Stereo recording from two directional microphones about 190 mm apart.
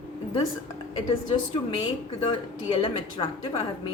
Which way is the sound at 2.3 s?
25° left (ahead or behind).